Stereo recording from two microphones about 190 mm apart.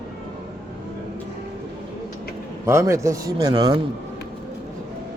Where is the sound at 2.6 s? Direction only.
15° right (ahead or behind).